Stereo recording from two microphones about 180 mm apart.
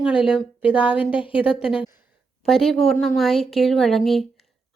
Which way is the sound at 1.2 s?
30° left (ahead or behind).